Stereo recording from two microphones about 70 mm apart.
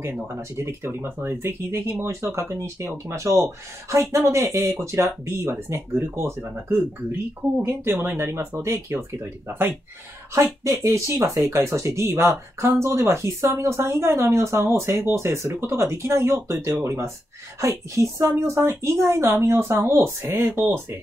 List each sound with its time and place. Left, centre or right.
0.0 s speech: right
7.6 s speech: right
10.3 s speech: right